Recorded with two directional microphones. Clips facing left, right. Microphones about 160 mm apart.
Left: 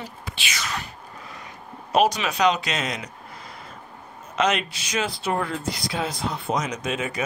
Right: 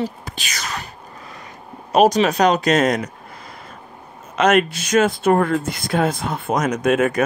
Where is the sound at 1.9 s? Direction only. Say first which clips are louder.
Right 6 dB; 45° right (ahead or behind).